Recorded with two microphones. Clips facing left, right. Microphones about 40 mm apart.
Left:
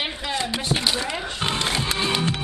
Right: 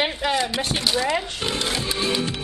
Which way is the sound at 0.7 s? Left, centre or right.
Centre.